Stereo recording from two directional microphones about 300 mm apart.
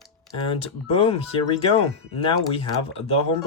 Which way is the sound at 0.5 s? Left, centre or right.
Centre.